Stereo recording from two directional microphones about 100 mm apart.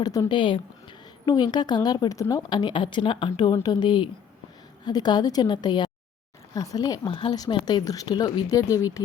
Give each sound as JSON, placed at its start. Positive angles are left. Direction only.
{"t": 0.0, "sound": "speech", "side_deg": 35}
{"t": 0.3, "sound": "speech", "side_deg": 55}
{"t": 1.2, "sound": "a woman's voice", "side_deg": 45}
{"t": 2.5, "sound": "a woman's voice", "side_deg": 50}
{"t": 6.5, "sound": "speech", "side_deg": 35}
{"t": 7.1, "sound": "speech", "side_deg": 60}
{"t": 7.5, "sound": "speech", "side_deg": 45}